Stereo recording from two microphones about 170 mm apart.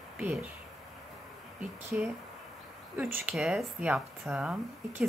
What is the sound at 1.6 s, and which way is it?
Speech, 5° right (ahead or behind).